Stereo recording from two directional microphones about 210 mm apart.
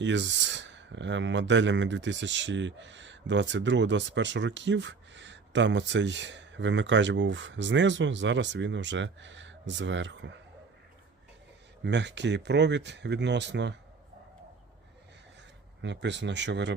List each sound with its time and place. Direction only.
0.0 s speech: 60° right (ahead or behind)
11.9 s speech: 55° right (ahead or behind)
15.8 s speech: 55° right (ahead or behind)